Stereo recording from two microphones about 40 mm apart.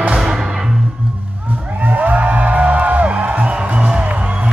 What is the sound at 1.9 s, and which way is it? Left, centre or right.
Music, right.